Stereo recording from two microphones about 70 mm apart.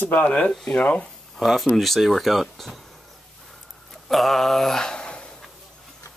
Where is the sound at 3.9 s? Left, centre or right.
Centre.